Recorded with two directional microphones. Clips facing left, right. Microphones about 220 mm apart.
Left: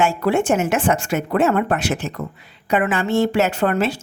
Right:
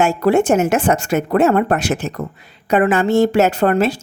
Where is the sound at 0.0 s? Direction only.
40° right (ahead or behind).